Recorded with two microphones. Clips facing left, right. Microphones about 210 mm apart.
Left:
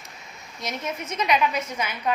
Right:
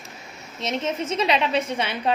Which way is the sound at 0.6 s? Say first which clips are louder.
Right 5 dB; 25° right (ahead or behind).